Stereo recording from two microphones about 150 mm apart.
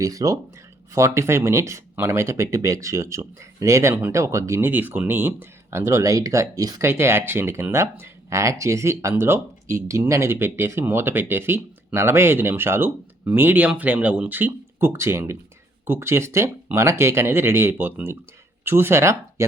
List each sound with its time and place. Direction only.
0.0 s speech: 25° right (ahead or behind)